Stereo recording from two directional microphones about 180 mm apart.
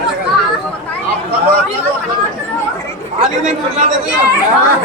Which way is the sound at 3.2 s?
35° right (ahead or behind).